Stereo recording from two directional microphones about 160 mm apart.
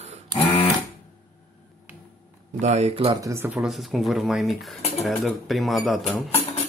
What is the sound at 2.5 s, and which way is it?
Speech, 45° right (ahead or behind).